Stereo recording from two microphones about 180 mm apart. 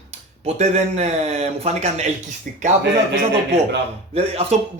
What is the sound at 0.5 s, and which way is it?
Speech, 40° right (ahead or behind).